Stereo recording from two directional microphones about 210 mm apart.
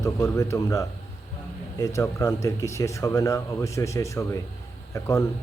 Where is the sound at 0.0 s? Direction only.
15° left (ahead or behind).